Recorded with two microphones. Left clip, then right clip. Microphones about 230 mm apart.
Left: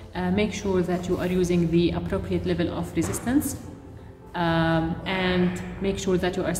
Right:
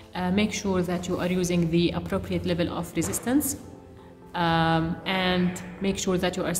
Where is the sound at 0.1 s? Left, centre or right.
Right.